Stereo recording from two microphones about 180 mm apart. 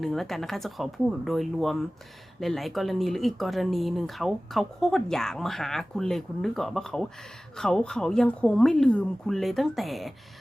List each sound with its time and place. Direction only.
0.0 s speech: centre (ahead or behind)